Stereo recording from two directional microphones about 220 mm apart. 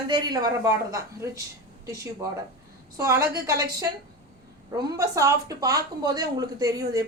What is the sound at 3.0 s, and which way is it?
Speech, 15° right (ahead or behind).